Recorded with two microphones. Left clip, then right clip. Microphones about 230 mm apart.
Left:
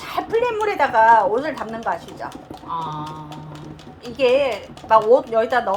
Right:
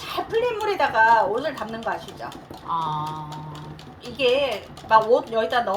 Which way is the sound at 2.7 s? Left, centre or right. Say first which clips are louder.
Right 1 dB; right.